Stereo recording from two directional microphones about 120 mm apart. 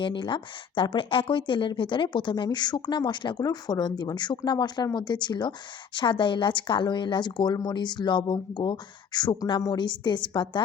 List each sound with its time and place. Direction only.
0.0 s speech: 45° left (ahead or behind)